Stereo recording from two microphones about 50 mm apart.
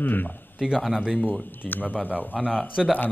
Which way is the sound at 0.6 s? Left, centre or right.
Centre.